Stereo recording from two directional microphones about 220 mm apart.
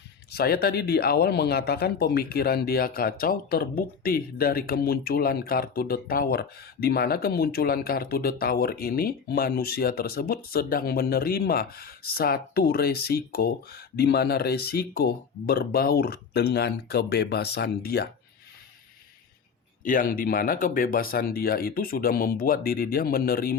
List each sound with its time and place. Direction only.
0.3 s speech: 45° left (ahead or behind)
19.8 s speech: 40° left (ahead or behind)